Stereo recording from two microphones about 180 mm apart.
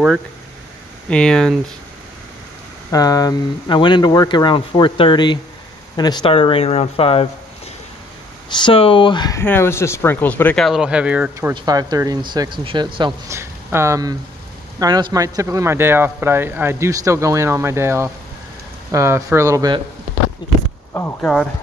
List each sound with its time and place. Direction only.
1.1 s speech: 5° left (ahead or behind)
2.9 s speech: 20° left (ahead or behind)
8.5 s speech: 25° left (ahead or behind); by 11.5 s 5° right (ahead or behind)
11.5 s speech: 20° right (ahead or behind)
13.4 s speech: 15° right (ahead or behind)
20.4 s speech: 25° left (ahead or behind)
20.9 s speech: 10° left (ahead or behind)